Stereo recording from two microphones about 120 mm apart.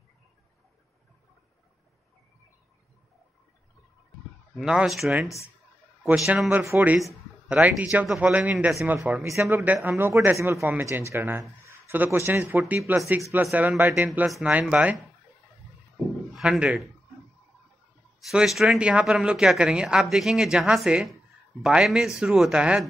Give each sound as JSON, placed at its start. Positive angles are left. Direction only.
{"t": 4.6, "sound": "speech", "side_deg": -5}
{"t": 6.5, "sound": "speech", "side_deg": -20}
{"t": 16.3, "sound": "speech", "side_deg": -10}
{"t": 18.3, "sound": "speech", "side_deg": -5}